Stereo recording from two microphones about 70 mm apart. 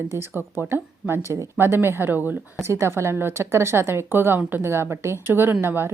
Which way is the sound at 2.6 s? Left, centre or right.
Right.